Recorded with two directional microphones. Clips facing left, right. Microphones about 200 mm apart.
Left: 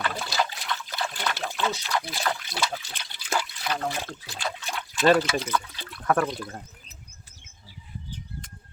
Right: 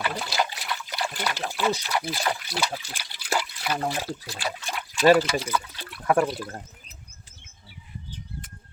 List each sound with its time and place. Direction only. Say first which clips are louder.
0.0 s liquid: right 1 dB; 5° right (ahead or behind)
6.2 s speech: right 2 dB; 5° right (ahead or behind)